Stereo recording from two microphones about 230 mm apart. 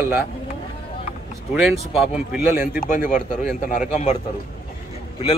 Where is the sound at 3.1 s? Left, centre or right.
Centre.